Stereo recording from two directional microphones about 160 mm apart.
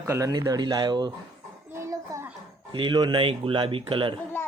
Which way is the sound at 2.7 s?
30° right (ahead or behind).